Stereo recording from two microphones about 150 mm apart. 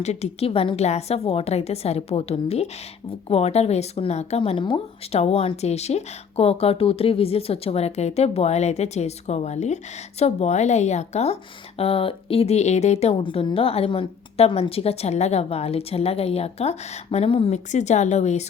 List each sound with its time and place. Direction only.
0.0 s a woman's voice: 45° left (ahead or behind)